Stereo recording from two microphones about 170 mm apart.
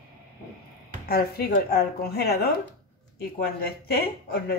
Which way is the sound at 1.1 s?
65° left (ahead or behind).